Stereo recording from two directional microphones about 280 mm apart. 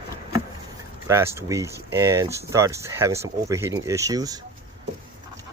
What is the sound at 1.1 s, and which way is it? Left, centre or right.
Speech, centre.